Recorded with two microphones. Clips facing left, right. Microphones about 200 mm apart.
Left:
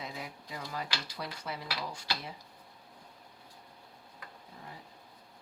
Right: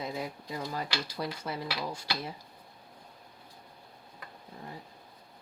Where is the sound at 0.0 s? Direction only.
40° right (ahead or behind).